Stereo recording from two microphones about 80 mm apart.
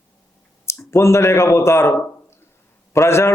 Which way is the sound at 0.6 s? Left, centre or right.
Left.